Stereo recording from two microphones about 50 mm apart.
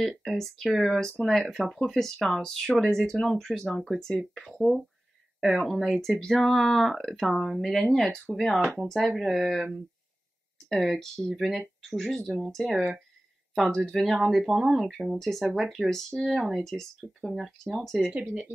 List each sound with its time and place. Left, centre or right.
0.0 s speech: centre
1.2 s speech: centre
1.7 s speech: centre
13.7 s speech: centre
16.6 s speech: centre
17.3 s speech: centre
18.1 s speech: right